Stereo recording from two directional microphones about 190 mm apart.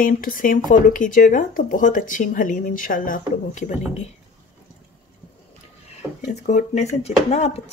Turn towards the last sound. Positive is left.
turn(degrees=35)  # may be behind; listen again after turning